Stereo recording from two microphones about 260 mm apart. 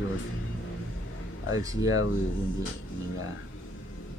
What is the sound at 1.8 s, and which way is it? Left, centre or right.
Speech, left.